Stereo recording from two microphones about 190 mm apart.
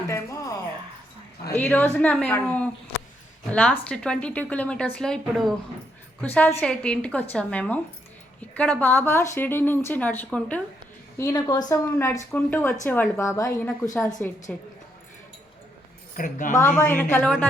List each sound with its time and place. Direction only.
0.1 s a sound: 15° left (ahead or behind)
1.6 s a woman's voice: 10° left (ahead or behind)
11.2 s speech: 20° left (ahead or behind)
16.1 s speech: 45° left (ahead or behind)
16.7 s speech: 10° left (ahead or behind)